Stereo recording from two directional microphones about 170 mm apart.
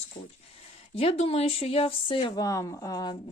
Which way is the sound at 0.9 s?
35° left (ahead or behind).